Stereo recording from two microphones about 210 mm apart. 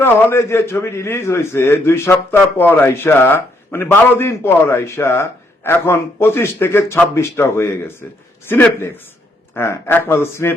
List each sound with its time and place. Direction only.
0.0 s a man's voice: 10° left (ahead or behind)